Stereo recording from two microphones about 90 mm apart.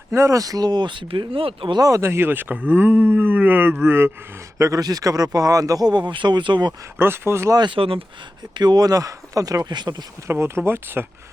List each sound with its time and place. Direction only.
0.1 s speech: 35° right (ahead or behind); by 1.7 s 90° right
1.7 s speech: 40° right (ahead or behind)
2.0 s speech: 30° right (ahead or behind)
4.8 s speech: 45° right (ahead or behind)
7.0 s speech: 25° right (ahead or behind)
7.5 s speech: 55° right (ahead or behind)
7.8 s speech: 90° right
8.5 s speech: 50° right (ahead or behind)
9.6 s speech: 55° right (ahead or behind)
10.2 s speech: 30° right (ahead or behind)